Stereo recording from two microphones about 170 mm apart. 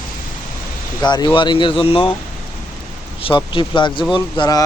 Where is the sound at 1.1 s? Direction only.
25° left (ahead or behind).